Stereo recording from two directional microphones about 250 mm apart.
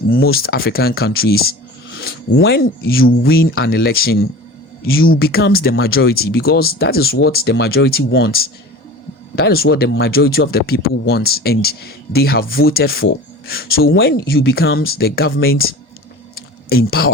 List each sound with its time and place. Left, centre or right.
0.1 s speech: left
14.6 s speech: left
14.8 s speech: left
16.3 s a sound: left